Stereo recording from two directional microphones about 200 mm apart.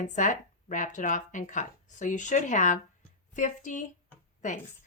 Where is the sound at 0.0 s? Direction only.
40° left (ahead or behind).